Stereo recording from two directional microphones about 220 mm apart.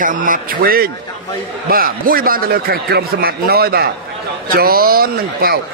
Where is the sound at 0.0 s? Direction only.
35° right (ahead or behind).